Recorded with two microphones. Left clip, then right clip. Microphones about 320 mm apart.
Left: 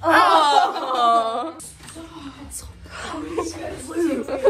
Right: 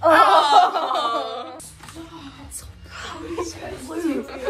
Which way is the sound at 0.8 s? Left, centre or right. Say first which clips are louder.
Left 4 dB; centre.